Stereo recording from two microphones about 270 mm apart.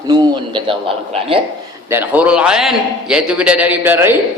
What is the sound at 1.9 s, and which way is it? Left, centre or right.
A man's voice, centre.